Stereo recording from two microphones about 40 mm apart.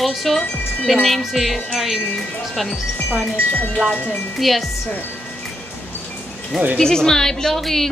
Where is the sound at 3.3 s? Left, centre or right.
Left.